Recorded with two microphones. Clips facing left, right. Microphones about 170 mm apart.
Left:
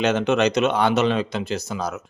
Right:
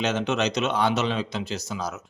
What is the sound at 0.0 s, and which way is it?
Speech, 55° left (ahead or behind).